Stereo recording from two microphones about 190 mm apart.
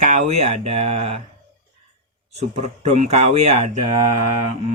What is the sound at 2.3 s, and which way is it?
Speech, 35° right (ahead or behind).